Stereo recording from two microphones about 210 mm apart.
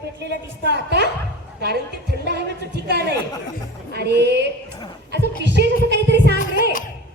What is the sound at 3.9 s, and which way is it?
A woman's voice, 50° right (ahead or behind).